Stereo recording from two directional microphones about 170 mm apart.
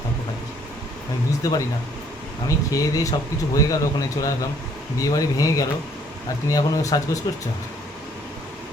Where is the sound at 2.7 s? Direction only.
20° left (ahead or behind).